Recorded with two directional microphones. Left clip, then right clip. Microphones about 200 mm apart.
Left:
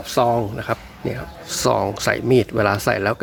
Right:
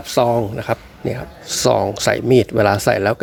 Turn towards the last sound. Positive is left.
turn(degrees=-15)  # may be behind; listen again after turning